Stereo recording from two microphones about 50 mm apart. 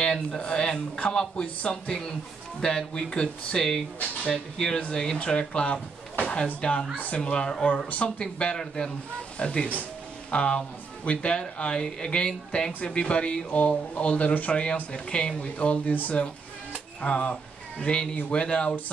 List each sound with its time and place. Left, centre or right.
0.0 s speech: centre; by 14.6 s left
14.9 s speech: centre